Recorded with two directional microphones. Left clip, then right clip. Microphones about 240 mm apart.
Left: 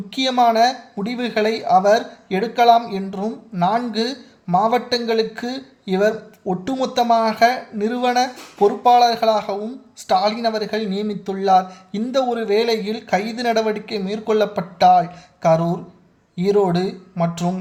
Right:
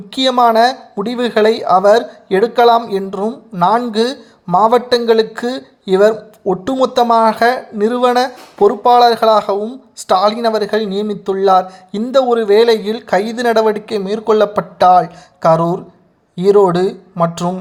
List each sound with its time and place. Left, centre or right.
0.1 s speech: right